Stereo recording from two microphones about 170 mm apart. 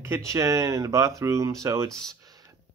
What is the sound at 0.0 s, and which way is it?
Speech, 15° right (ahead or behind).